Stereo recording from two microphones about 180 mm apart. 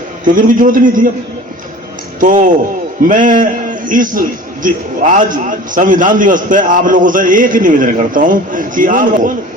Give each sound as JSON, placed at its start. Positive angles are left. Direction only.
{"t": 0.3, "sound": "a man's voice", "side_deg": -50}
{"t": 2.2, "sound": "a man's voice", "side_deg": -45}